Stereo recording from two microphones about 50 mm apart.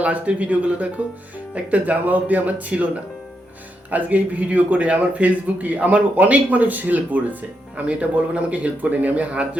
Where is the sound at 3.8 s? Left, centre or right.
Right.